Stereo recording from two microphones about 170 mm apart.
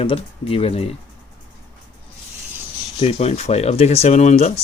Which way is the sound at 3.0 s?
40° left (ahead or behind).